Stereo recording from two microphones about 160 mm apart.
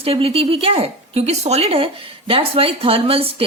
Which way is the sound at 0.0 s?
40° right (ahead or behind).